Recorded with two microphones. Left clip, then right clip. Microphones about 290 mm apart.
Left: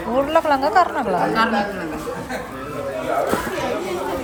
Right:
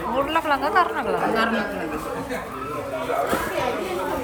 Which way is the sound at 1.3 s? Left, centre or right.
Centre.